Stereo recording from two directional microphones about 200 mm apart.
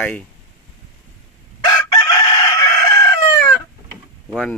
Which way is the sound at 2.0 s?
20° left (ahead or behind).